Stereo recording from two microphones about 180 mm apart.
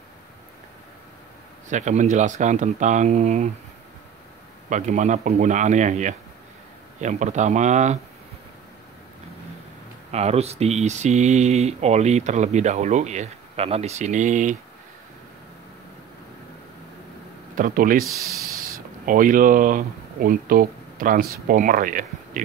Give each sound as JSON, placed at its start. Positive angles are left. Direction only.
{"t": 1.7, "sound": "speech", "side_deg": -40}
{"t": 4.6, "sound": "speech", "side_deg": -45}
{"t": 10.1, "sound": "speech", "side_deg": -35}
{"t": 17.6, "sound": "speech", "side_deg": -50}
{"t": 18.0, "sound": "speech", "side_deg": -15}
{"t": 19.0, "sound": "speech", "side_deg": -50}